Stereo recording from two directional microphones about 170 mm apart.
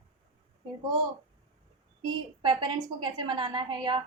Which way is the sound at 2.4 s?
25° right (ahead or behind).